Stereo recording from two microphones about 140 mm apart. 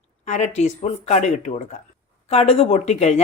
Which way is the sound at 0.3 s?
55° left (ahead or behind).